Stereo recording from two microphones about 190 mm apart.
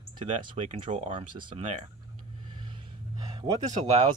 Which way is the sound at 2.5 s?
25° right (ahead or behind).